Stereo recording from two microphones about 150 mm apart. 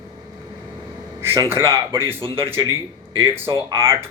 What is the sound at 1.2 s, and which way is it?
Speech, 15° right (ahead or behind).